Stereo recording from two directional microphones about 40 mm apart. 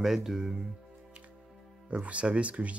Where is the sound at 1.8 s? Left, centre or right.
Right.